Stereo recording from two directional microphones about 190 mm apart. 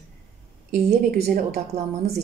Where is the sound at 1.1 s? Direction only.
55° right (ahead or behind).